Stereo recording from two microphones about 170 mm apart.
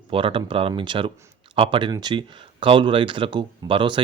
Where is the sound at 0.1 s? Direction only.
30° right (ahead or behind).